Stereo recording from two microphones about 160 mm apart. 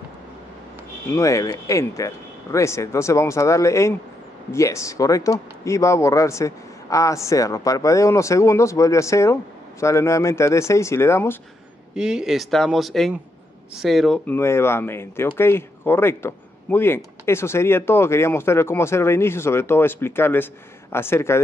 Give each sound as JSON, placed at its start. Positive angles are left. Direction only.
{"t": 1.1, "sound": "speech", "side_deg": 20}
{"t": 11.9, "sound": "speech", "side_deg": -5}